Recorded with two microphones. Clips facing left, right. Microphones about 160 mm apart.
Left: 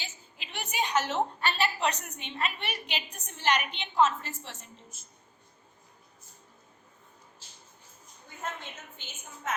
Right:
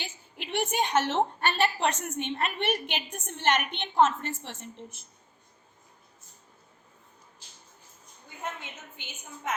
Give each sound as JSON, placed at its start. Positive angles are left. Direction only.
{"t": 0.0, "sound": "a woman's voice", "side_deg": -55}
{"t": 9.0, "sound": "a woman's voice", "side_deg": -15}